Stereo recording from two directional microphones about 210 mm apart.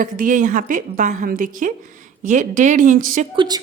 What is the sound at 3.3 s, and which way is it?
Speech, 20° right (ahead or behind).